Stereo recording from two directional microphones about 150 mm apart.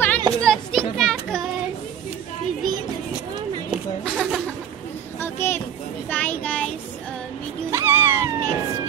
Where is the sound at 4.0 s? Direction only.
Centre (ahead or behind).